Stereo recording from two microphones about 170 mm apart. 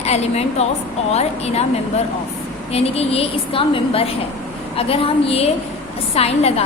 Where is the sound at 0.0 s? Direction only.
40° left (ahead or behind).